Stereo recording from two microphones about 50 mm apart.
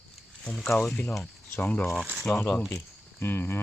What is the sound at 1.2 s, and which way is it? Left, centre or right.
Speech, left.